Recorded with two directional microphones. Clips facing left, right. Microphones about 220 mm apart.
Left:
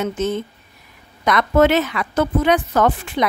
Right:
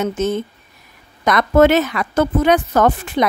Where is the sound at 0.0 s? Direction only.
45° right (ahead or behind).